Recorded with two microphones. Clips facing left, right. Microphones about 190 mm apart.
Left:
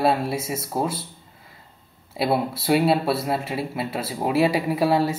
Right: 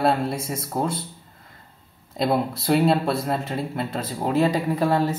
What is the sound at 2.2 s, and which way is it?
Speech, 5° left (ahead or behind).